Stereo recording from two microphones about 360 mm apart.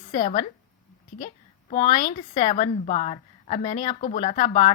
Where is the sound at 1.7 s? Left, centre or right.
Centre.